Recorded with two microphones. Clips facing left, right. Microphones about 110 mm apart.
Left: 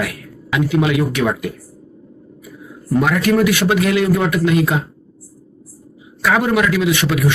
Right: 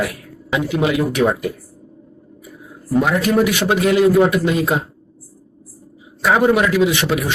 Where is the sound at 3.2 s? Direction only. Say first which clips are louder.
Left 1 dB; 35° right (ahead or behind).